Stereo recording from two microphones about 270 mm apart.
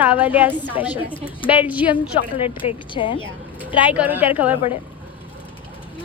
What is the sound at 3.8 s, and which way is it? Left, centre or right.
Speech, centre.